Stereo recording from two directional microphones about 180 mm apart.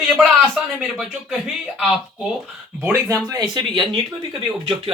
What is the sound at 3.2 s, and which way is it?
Speech, 20° right (ahead or behind).